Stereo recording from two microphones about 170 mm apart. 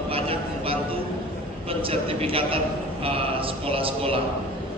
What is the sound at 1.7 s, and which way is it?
A man's voice, 35° right (ahead or behind).